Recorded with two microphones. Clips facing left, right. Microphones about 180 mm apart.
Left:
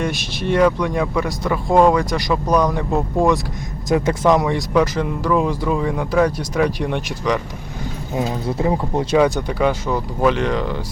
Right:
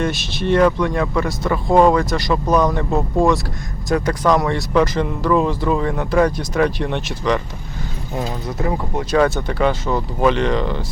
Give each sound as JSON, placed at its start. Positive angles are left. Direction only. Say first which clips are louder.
{"t": 0.0, "sound": "speech", "louder": "right 2 dB", "side_deg": 10}
{"t": 2.9, "sound": "speech", "louder": "even", "side_deg": 0}
{"t": 3.8, "sound": "speech", "louder": "left 1 dB", "side_deg": 20}
{"t": 8.4, "sound": "speech", "louder": "left 3 dB", "side_deg": 30}
{"t": 9.1, "sound": "speech", "louder": "even", "side_deg": 15}